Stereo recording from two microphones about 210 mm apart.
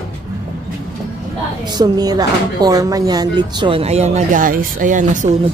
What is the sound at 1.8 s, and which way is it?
Speech, 20° right (ahead or behind).